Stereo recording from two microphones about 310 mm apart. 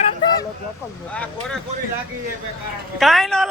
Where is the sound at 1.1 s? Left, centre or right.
Centre.